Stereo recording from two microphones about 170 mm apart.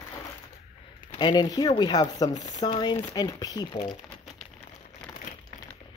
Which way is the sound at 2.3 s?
45° left (ahead or behind).